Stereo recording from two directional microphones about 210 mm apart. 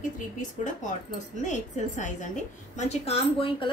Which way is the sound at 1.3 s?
35° left (ahead or behind).